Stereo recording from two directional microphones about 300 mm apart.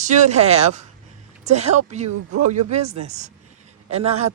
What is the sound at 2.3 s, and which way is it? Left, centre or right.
Speech, right.